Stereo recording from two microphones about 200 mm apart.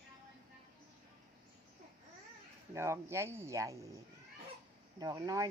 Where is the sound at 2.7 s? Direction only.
15° right (ahead or behind).